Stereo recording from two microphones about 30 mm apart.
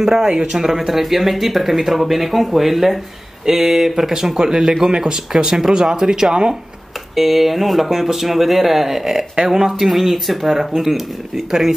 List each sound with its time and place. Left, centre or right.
0.0 s speech: centre
0.7 s speech: centre
3.4 s speech: centre
7.2 s speech: centre